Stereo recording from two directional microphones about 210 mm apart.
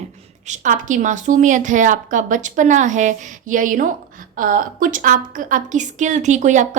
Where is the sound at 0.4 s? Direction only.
35° right (ahead or behind).